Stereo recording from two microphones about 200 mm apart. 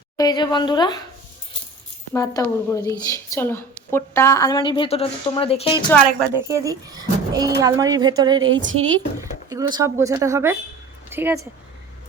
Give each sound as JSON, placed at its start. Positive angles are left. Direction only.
{"t": 0.2, "sound": "speech", "side_deg": 20}
{"t": 2.1, "sound": "a woman's voice", "side_deg": 15}
{"t": 6.3, "sound": "a woman's voice", "side_deg": -15}
{"t": 8.4, "sound": "a woman's voice", "side_deg": -70}
{"t": 9.5, "sound": "speech", "side_deg": -20}